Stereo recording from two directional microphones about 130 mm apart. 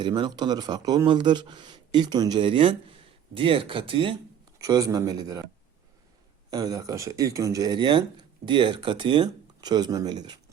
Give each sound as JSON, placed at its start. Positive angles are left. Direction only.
{"t": 0.0, "sound": "speech", "side_deg": -35}
{"t": 4.5, "sound": "speech", "side_deg": -25}
{"t": 6.5, "sound": "speech", "side_deg": -30}